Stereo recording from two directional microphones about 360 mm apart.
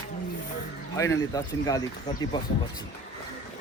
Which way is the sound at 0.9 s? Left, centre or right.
Centre.